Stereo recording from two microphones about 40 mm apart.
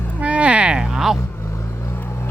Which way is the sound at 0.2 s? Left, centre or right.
Right.